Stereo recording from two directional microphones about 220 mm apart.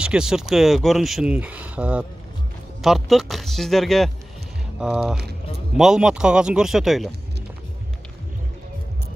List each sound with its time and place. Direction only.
0.0 s speech: 5° right (ahead or behind)